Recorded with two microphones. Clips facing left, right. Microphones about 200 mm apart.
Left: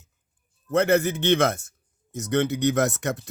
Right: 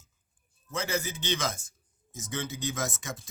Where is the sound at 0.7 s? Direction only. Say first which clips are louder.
Left 12 dB; 60° left (ahead or behind).